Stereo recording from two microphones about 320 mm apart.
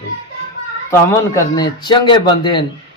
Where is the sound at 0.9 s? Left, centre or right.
Centre.